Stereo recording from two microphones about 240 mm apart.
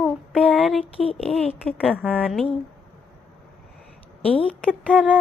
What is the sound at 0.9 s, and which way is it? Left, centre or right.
Speech, left.